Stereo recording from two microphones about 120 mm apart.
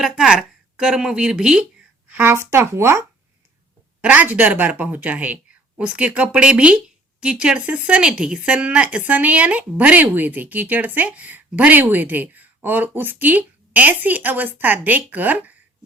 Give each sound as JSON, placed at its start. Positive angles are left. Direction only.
{"t": 0.0, "sound": "a woman's voice", "side_deg": -5}
{"t": 2.0, "sound": "speech", "side_deg": -15}
{"t": 4.0, "sound": "a woman's voice", "side_deg": -10}